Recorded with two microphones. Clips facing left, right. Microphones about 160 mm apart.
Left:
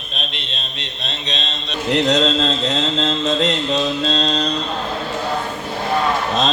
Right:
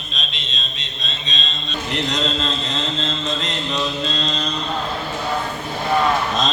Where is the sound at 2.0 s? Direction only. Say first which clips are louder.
Left 6 dB; 75° left (ahead or behind).